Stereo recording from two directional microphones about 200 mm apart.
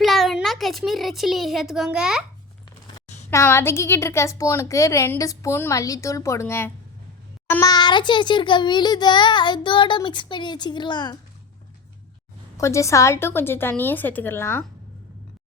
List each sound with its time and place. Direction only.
0.0 s a child's voice: centre (ahead or behind)
3.2 s a woman's voice: 10° left (ahead or behind)
12.5 s a woman's voice: 15° left (ahead or behind)